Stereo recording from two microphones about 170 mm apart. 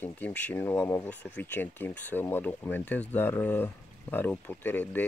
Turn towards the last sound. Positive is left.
turn(degrees=10)  # may be behind; listen again after turning